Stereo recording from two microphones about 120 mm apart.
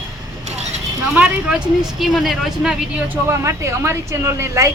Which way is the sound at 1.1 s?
10° right (ahead or behind).